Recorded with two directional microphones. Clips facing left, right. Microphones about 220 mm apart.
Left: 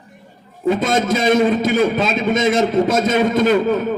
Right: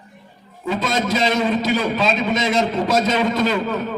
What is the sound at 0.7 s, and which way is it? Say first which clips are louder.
A man's voice: left 3 dB; 50° left (ahead or behind).